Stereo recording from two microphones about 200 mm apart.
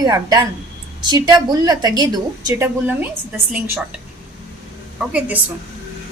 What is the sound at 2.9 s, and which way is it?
Speech, 10° right (ahead or behind).